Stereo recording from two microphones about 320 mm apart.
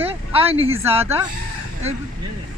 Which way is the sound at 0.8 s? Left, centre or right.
Centre.